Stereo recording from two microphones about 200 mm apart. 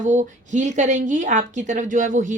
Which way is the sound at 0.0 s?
40° right (ahead or behind).